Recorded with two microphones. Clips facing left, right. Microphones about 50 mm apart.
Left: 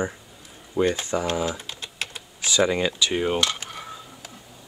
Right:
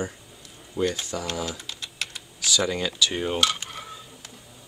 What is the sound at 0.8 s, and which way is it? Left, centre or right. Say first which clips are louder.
Speech: left 4 dB; left.